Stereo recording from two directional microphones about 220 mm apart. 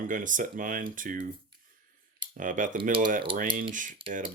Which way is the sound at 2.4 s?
35° right (ahead or behind).